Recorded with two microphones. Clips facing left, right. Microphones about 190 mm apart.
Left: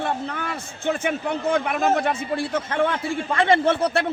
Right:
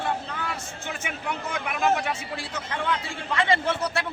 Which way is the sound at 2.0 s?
55° left (ahead or behind).